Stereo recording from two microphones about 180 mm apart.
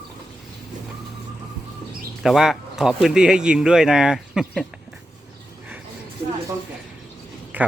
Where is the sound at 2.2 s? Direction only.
Centre (ahead or behind).